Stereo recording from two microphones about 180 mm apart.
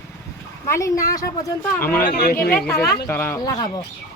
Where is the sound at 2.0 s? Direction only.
50° left (ahead or behind).